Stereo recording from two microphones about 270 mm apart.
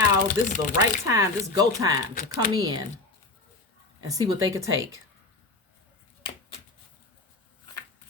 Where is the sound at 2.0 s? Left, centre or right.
Left.